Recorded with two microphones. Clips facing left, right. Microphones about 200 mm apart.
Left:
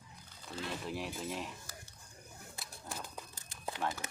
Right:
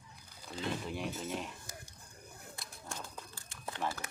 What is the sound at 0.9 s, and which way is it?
Speech, centre (ahead or behind).